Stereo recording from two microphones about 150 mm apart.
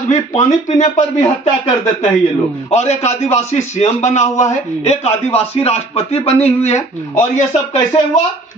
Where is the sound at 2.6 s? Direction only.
45° left (ahead or behind).